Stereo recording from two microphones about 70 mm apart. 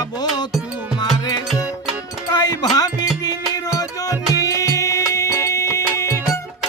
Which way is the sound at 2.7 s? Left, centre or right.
Left.